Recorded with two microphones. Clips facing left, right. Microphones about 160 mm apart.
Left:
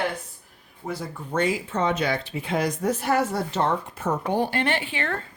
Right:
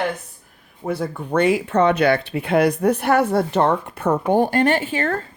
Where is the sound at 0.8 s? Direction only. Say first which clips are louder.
Right 8 dB; 60° right (ahead or behind); by 5.3 s 40° right (ahead or behind).